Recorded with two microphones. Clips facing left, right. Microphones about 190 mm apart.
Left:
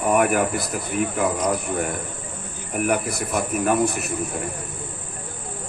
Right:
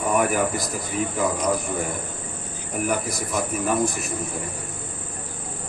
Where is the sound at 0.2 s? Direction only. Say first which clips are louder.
Left 2 dB; 60° left (ahead or behind).